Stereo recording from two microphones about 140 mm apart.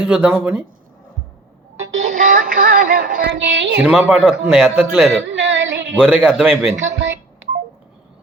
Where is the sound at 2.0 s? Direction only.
65° right (ahead or behind); by 3.3 s 90° right.